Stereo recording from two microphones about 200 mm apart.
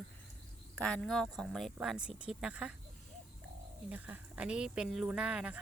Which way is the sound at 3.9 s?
10° right (ahead or behind).